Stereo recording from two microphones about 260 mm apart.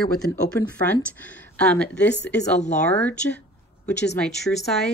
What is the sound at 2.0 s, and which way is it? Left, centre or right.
Speech, left.